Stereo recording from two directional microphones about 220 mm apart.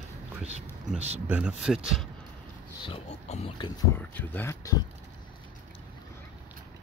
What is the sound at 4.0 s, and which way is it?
Speech, 10° left (ahead or behind).